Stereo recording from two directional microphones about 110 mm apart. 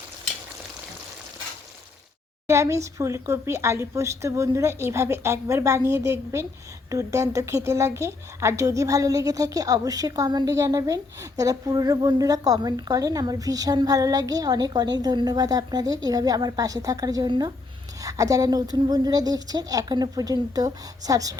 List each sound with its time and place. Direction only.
2.5 s a woman's voice: 25° right (ahead or behind)